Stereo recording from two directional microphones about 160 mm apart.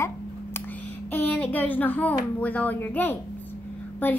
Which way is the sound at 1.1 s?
10° left (ahead or behind).